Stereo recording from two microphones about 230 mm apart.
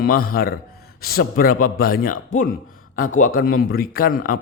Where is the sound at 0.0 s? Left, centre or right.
Left.